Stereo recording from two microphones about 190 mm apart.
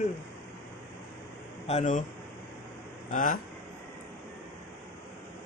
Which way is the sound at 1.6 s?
35° left (ahead or behind).